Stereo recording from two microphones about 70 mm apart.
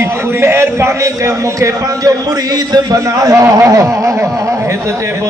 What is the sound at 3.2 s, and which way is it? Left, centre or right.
Speech, right.